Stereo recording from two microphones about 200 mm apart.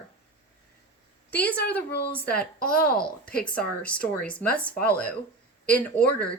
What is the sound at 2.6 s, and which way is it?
Speech, 50° left (ahead or behind).